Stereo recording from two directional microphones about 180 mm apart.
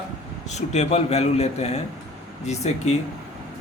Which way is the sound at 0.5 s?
40° left (ahead or behind).